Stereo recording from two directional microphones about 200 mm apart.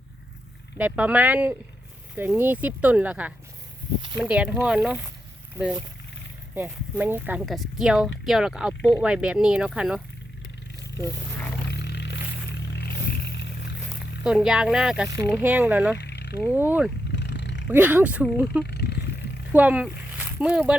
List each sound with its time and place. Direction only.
0.8 s speech: 5° right (ahead or behind)
6.5 s speech: 10° right (ahead or behind)
11.7 s vehicle: 60° left (ahead or behind)
14.3 s speech: 5° right (ahead or behind)
15.1 s speech: 15° right (ahead or behind)
16.0 s a sound: 60° left (ahead or behind)
16.5 s speech: 10° right (ahead or behind)
17.1 s roaring cats: 60° left (ahead or behind)
17.7 s speech: 10° right (ahead or behind)
18.6 s wild animals: 55° left (ahead or behind)
19.5 s speech: 10° right (ahead or behind)